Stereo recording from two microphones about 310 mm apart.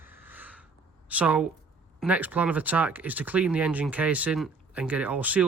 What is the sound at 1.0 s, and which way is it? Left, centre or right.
Speech, centre.